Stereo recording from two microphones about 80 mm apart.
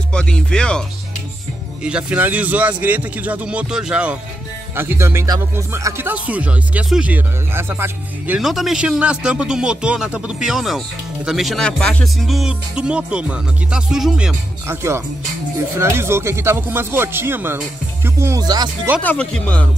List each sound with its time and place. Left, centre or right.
0.1 s speech: centre
1.8 s a man's voice: centre
4.7 s speech: right
6.0 s speech: centre
7.5 s a man's voice: right
8.4 s speech: centre
11.6 s speech: centre
14.7 s speech: right
18.4 s speech: right
19.0 s speech: centre